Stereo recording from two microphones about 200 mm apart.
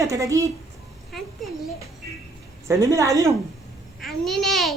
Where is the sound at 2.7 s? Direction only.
15° right (ahead or behind).